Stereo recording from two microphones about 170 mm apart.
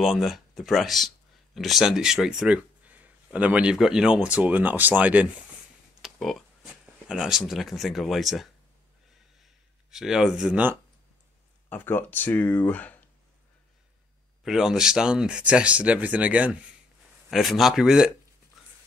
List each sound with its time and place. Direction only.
0.0 s speech: centre (ahead or behind)
9.8 s speech: 5° right (ahead or behind)
11.7 s speech: 10° left (ahead or behind)
14.4 s speech: 5° right (ahead or behind)
18.6 s a sound: centre (ahead or behind)